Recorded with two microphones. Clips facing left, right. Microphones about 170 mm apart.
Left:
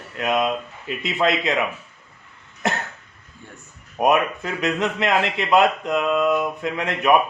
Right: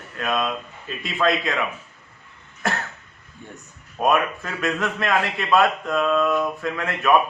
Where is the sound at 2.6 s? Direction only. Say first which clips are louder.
Left 2 dB; 20° left (ahead or behind).